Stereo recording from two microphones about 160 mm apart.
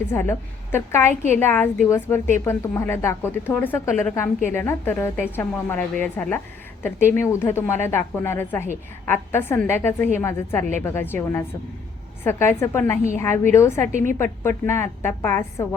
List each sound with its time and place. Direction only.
0.1 s a woman's voice: 15° left (ahead or behind)
13.8 s a woman's voice: 50° right (ahead or behind)
14.4 s a woman's voice: 15° left (ahead or behind)